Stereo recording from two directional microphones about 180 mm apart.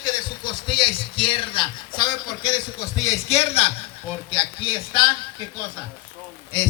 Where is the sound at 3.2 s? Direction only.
35° left (ahead or behind).